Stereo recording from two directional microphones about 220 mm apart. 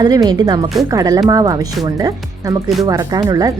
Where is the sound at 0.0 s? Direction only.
20° right (ahead or behind).